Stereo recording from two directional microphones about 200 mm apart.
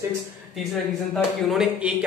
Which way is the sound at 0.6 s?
Centre (ahead or behind).